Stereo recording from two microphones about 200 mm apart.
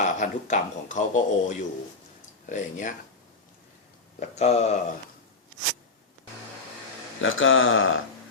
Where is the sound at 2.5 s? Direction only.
40° left (ahead or behind).